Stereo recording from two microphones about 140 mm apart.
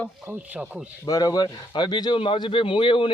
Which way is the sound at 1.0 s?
25° left (ahead or behind).